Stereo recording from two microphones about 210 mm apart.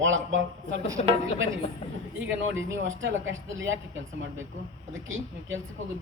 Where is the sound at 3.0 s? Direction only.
65° right (ahead or behind).